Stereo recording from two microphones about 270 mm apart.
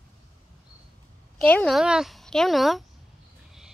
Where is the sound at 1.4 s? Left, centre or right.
Centre.